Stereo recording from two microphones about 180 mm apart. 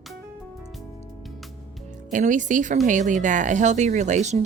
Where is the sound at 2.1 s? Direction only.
45° right (ahead or behind).